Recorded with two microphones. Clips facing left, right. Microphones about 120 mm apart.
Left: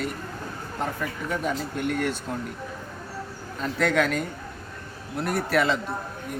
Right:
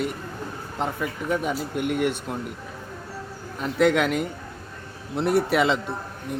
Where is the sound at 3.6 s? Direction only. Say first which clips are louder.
Right 3 dB; 15° right (ahead or behind).